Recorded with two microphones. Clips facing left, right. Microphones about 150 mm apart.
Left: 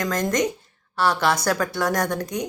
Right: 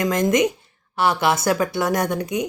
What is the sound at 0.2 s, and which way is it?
Speech, 10° right (ahead or behind).